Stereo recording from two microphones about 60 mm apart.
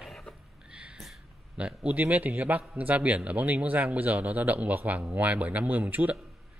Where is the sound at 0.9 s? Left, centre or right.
Centre.